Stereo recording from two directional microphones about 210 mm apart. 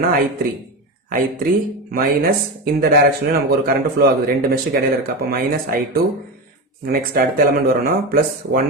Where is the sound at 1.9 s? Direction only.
45° right (ahead or behind).